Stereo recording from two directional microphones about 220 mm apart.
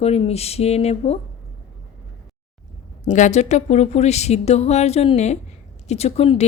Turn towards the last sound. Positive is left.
turn(degrees=25)  # may be behind; listen again after turning